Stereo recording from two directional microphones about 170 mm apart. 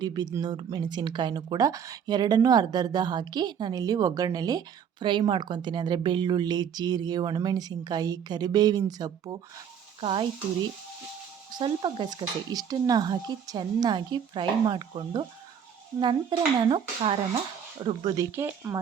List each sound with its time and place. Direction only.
0.0 s speech: 20° right (ahead or behind)
18.3 s speech: 15° right (ahead or behind)